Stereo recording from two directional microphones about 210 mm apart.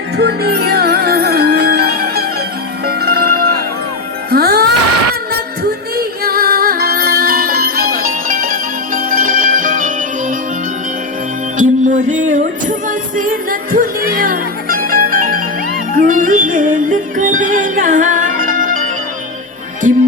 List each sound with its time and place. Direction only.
0.2 s music: 50° right (ahead or behind)
2.8 s zither: 50° right (ahead or behind)
4.3 s music: 45° right (ahead or behind)
6.0 s music: 45° right (ahead or behind)
11.5 s music: 40° right (ahead or behind)
19.9 s music: 35° right (ahead or behind)